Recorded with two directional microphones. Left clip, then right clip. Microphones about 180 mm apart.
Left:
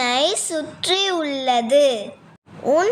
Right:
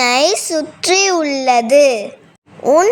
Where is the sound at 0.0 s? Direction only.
25° right (ahead or behind).